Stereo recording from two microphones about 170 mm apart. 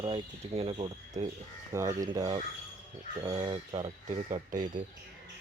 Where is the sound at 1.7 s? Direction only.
20° right (ahead or behind).